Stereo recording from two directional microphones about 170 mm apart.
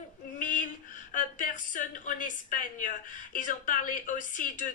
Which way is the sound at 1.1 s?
50° left (ahead or behind).